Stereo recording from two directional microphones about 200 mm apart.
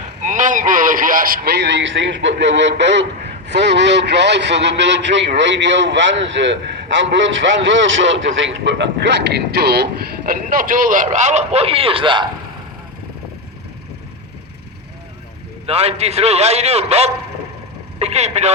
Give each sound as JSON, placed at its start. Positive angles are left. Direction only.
{"t": 0.2, "sound": "a man's voice", "side_deg": -40}
{"t": 15.6, "sound": "a man's voice", "side_deg": -30}